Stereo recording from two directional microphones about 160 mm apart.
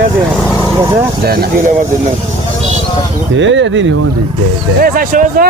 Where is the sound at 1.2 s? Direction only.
70° right (ahead or behind).